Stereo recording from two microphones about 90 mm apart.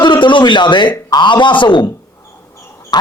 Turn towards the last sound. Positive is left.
turn(degrees=50)  # may be behind; listen again after turning